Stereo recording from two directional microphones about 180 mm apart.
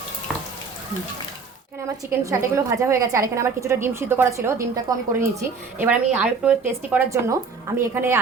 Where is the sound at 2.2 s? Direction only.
15° right (ahead or behind).